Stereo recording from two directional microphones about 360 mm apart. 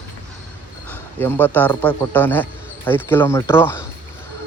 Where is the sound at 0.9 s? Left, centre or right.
Centre.